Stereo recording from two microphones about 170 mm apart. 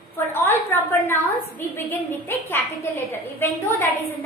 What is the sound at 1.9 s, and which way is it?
A woman's voice, 10° left (ahead or behind).